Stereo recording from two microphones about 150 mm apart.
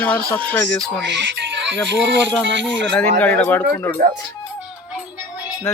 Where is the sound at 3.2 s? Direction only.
10° left (ahead or behind).